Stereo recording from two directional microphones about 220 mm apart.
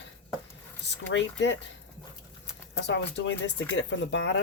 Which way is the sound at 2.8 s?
50° left (ahead or behind).